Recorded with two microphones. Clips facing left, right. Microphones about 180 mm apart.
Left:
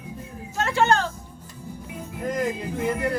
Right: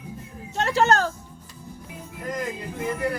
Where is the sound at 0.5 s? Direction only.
35° right (ahead or behind).